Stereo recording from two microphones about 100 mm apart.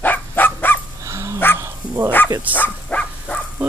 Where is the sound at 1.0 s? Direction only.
30° right (ahead or behind).